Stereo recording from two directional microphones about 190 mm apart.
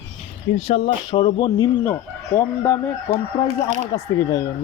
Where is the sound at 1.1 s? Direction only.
25° left (ahead or behind).